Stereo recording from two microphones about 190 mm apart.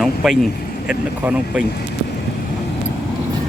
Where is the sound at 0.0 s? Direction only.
Centre (ahead or behind).